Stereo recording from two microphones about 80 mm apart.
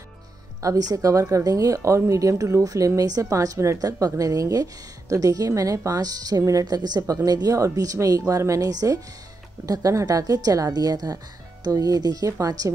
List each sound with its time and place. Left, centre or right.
0.6 s speech: right
6.6 s a woman's voice: right